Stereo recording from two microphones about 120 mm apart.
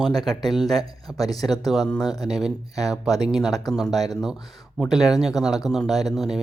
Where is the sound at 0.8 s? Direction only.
30° left (ahead or behind).